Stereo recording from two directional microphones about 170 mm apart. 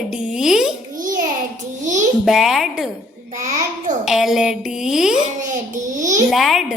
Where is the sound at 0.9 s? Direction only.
50° right (ahead or behind).